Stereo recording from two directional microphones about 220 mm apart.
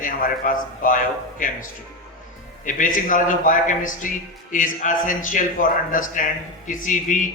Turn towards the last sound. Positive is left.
turn(degrees=35)  # may be behind; listen again after turning